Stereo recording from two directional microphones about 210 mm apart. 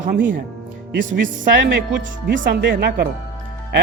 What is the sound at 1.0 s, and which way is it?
Speech, 60° right (ahead or behind).